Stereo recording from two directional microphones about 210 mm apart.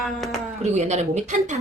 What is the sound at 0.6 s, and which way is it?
Speech, 35° right (ahead or behind).